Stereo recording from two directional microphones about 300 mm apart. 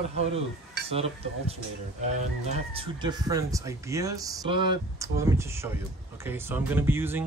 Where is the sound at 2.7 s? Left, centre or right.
Centre.